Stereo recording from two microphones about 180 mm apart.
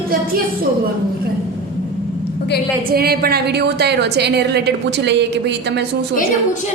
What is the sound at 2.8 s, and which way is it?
A woman's voice, 60° right (ahead or behind).